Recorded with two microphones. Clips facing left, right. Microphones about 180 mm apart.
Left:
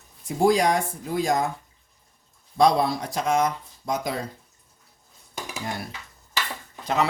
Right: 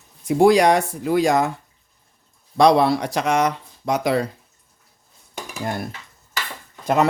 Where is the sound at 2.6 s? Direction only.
80° right.